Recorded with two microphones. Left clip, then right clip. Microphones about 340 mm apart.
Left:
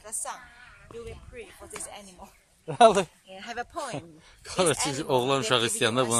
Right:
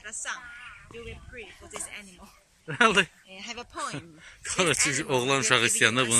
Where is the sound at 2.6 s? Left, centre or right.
Centre.